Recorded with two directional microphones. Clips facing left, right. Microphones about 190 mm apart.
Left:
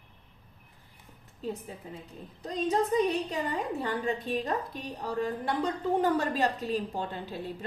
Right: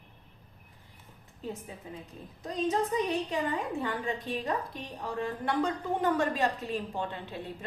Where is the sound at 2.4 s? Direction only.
35° left (ahead or behind).